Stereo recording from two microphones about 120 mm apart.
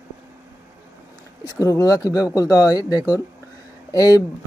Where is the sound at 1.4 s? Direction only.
30° left (ahead or behind).